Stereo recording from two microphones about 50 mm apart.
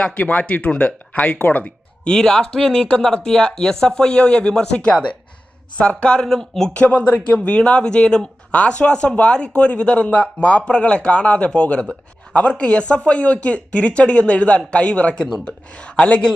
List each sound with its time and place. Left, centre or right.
0.0 s speech: left
2.0 s speech: centre
6.2 s speech: centre
6.7 s speech: left